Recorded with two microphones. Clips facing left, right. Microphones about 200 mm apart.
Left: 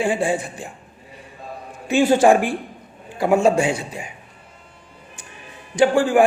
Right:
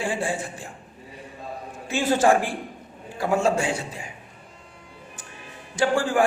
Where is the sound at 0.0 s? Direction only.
15° left (ahead or behind).